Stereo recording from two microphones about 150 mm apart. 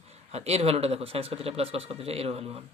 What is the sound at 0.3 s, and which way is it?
Speech, 45° right (ahead or behind).